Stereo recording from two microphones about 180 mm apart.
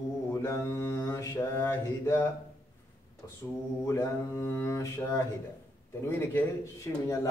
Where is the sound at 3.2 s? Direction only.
15° left (ahead or behind).